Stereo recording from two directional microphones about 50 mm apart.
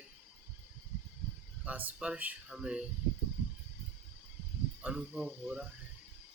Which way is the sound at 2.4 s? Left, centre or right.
Centre.